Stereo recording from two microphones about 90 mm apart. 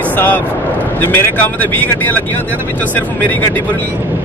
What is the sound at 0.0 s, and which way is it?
Vehicle, 20° left (ahead or behind).